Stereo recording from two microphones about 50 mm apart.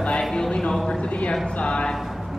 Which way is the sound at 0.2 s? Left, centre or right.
Centre.